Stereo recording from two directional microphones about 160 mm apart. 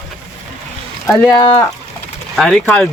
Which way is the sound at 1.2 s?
25° left (ahead or behind).